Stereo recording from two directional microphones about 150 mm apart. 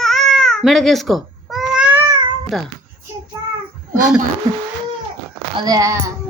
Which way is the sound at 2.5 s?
Centre (ahead or behind).